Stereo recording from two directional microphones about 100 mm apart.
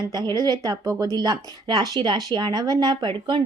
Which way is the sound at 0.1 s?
45° right (ahead or behind).